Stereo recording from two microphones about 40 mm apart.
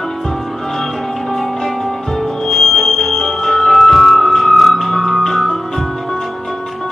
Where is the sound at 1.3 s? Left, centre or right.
Centre.